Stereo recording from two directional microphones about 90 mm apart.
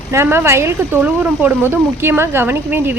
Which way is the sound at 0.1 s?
30° right (ahead or behind).